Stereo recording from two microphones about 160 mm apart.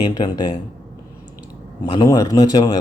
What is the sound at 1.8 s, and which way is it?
Speech, 25° left (ahead or behind).